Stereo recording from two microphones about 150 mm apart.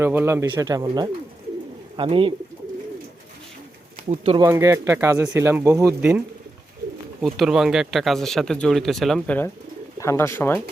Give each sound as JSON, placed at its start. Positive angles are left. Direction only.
{"t": 0.0, "sound": "speech", "side_deg": -15}
{"t": 0.4, "sound": "speech", "side_deg": -30}
{"t": 2.0, "sound": "speech", "side_deg": -35}
{"t": 4.4, "sound": "speech", "side_deg": -20}
{"t": 7.2, "sound": "speech", "side_deg": 0}